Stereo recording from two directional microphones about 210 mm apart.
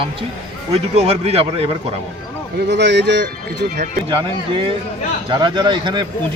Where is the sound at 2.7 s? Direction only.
55° right (ahead or behind).